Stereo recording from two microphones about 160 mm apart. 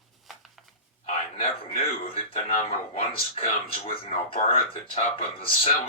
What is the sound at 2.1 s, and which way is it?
Speech, 35° left (ahead or behind).